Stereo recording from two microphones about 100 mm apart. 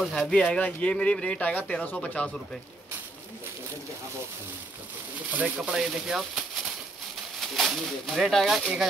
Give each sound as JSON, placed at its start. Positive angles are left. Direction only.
{"t": 0.0, "sound": "speech", "side_deg": 5}
{"t": 5.6, "sound": "speech", "side_deg": -5}